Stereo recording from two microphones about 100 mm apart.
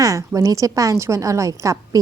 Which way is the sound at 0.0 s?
35° right (ahead or behind).